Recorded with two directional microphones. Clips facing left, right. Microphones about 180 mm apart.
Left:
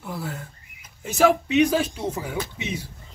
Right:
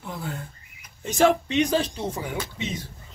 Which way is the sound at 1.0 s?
5° left (ahead or behind).